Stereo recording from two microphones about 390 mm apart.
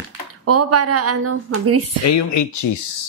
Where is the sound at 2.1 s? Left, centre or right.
Left.